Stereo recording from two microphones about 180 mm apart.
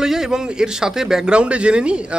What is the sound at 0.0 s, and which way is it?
A man's voice, centre (ahead or behind).